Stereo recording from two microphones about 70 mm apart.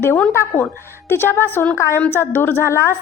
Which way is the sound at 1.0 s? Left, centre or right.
Left.